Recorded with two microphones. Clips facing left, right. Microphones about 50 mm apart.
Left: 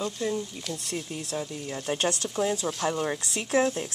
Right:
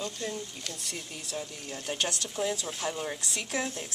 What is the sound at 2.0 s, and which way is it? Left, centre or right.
Speech, left.